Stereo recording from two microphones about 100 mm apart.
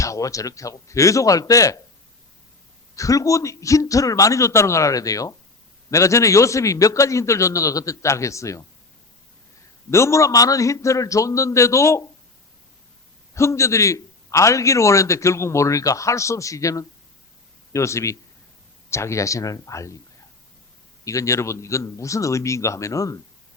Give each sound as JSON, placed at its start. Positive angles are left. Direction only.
{"t": 0.0, "sound": "a man's voice", "side_deg": 35}
{"t": 2.9, "sound": "a man's voice", "side_deg": 35}
{"t": 9.9, "sound": "a man's voice", "side_deg": 30}
{"t": 13.3, "sound": "a man's voice", "side_deg": 30}
{"t": 21.0, "sound": "a man's voice", "side_deg": 30}